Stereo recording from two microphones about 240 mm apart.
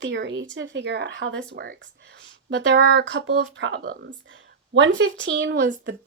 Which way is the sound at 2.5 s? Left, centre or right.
Right.